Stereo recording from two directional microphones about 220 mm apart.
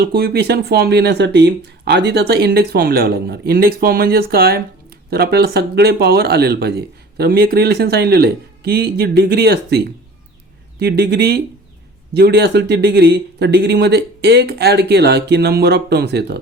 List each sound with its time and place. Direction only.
0.1 s speech: 45° right (ahead or behind)